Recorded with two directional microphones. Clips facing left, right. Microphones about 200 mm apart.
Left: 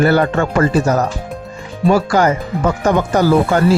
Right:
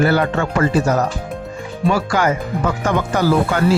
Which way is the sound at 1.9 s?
40° left (ahead or behind).